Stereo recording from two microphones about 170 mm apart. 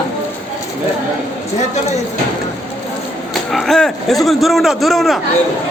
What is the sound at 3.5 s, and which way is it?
A man's voice, centre (ahead or behind).